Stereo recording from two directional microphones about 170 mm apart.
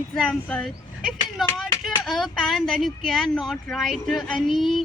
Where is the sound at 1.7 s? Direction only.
25° left (ahead or behind).